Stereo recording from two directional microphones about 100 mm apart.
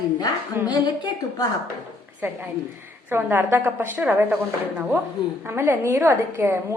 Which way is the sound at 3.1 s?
20° right (ahead or behind).